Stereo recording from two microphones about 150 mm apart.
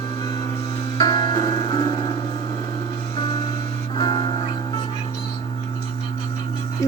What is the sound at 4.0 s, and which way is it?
Music, 30° left (ahead or behind).